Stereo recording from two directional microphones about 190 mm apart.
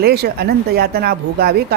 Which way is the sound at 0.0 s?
55° right (ahead or behind).